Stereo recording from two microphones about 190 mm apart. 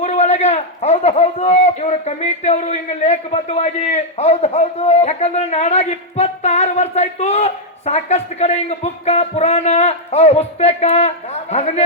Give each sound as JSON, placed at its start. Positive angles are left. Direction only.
{"t": 0.0, "sound": "a man's voice", "side_deg": 35}